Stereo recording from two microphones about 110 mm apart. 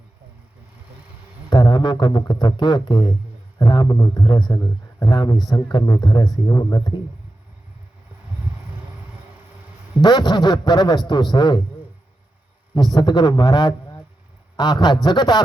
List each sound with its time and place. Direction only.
1.5 s a man's voice: 45° left (ahead or behind)
10.0 s a man's voice: 40° left (ahead or behind)
12.7 s a man's voice: 40° left (ahead or behind)